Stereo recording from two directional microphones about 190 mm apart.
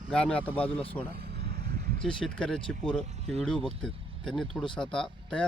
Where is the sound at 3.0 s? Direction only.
35° right (ahead or behind).